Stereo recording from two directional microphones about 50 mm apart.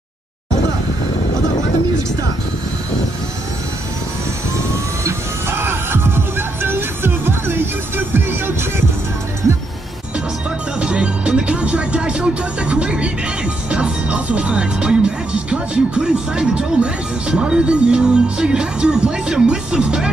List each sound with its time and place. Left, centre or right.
5.0 s music: right
10.8 s music: right